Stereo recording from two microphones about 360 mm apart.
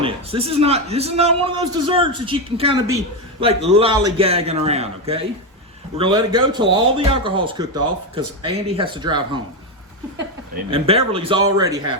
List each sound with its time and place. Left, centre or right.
0.0 s speech: centre
10.7 s speech: centre